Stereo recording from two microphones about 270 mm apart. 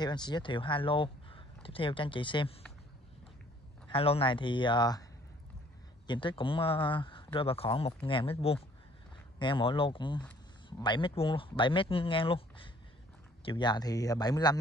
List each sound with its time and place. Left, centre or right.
0.0 s speech: centre
3.9 s speech: left
6.0 s speech: centre